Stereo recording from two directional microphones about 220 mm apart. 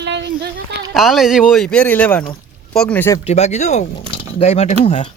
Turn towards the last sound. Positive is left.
turn(degrees=30)  # may be behind; listen again after turning